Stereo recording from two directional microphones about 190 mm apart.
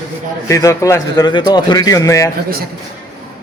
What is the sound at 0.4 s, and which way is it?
A man's voice, 15° left (ahead or behind).